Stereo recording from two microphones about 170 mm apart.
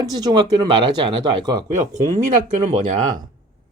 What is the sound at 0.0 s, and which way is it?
Speech, 25° right (ahead or behind).